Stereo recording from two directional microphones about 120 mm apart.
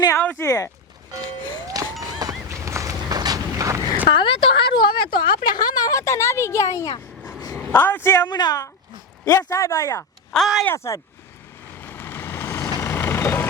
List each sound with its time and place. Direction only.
0.2 s speech: 15° left (ahead or behind)
0.4 s speech: 25° left (ahead or behind)
2.0 s a sound: 30° right (ahead or behind)
4.1 s speech: 45° left (ahead or behind); by 7.0 s 25° left (ahead or behind)
7.6 s a woman's voice: 15° left (ahead or behind)
8.3 s a woman's voice: 35° left (ahead or behind)
10.3 s speech: centre (ahead or behind)
10.7 s speech: 25° left (ahead or behind)
11.8 s vehicle: 15° left (ahead or behind)